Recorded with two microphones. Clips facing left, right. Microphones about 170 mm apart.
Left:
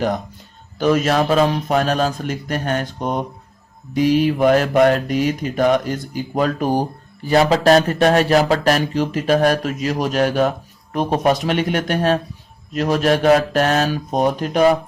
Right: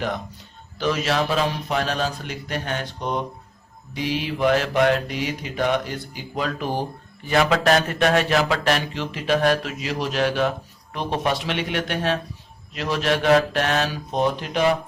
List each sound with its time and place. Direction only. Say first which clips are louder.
0.8 s mantra: left 6 dB; 50° left (ahead or behind)
7.3 s speech: left 5 dB; 35° left (ahead or behind)
10.9 s mantra: left 7 dB; 45° left (ahead or behind)